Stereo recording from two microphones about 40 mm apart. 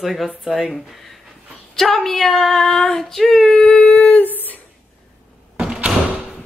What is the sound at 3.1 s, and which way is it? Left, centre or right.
Female singing, centre.